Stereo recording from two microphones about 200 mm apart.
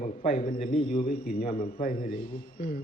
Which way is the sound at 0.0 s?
30° left (ahead or behind).